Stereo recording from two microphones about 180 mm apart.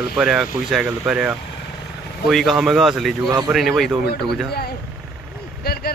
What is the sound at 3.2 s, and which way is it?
Speech, 20° right (ahead or behind).